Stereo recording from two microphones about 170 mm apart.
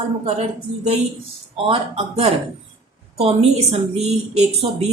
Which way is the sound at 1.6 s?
35° right (ahead or behind).